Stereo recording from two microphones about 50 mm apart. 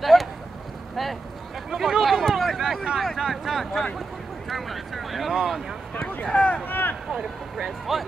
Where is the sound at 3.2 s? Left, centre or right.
Centre.